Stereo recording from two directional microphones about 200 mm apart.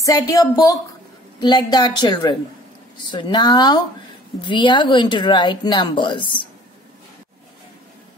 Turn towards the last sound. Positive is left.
turn(degrees=25)  # may be behind; listen again after turning